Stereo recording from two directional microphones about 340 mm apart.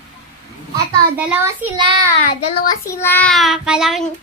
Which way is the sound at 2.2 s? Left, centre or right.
Left.